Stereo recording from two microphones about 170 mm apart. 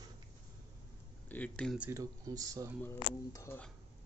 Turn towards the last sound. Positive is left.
turn(degrees=15)  # may be behind; listen again after turning